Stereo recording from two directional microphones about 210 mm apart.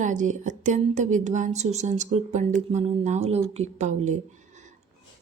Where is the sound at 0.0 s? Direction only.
35° right (ahead or behind).